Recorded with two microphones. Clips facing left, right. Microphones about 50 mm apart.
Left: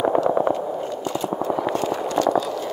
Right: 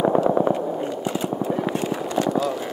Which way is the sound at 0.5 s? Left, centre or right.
Centre.